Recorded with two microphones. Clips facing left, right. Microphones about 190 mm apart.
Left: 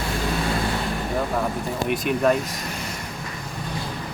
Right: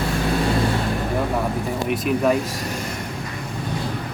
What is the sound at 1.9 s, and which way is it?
Speech, centre (ahead or behind).